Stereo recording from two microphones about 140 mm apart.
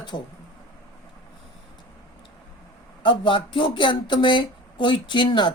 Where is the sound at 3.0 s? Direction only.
35° left (ahead or behind).